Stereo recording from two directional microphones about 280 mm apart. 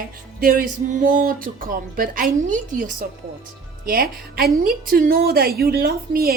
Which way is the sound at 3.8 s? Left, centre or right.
Right.